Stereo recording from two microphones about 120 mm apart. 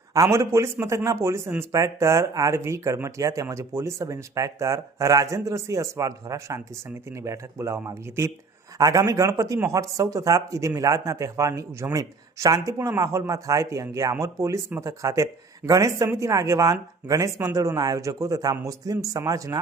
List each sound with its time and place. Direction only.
0.1 s a man's voice: 25° right (ahead or behind)